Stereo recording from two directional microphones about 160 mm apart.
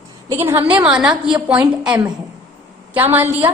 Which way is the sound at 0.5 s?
10° right (ahead or behind).